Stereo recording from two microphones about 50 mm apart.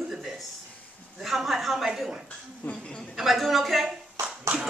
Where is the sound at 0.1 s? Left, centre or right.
Centre.